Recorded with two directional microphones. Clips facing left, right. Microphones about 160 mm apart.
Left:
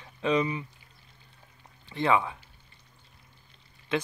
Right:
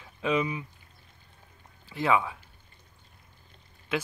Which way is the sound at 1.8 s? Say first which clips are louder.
Even; 5° right (ahead or behind).